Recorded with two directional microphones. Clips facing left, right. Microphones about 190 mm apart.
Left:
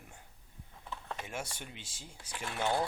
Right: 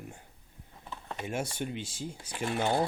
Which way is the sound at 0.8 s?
5° right (ahead or behind).